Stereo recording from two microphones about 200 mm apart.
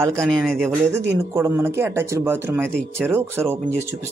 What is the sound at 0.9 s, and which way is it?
Speech, 10° right (ahead or behind).